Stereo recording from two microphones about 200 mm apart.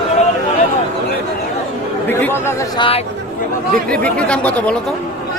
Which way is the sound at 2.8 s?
30° left (ahead or behind).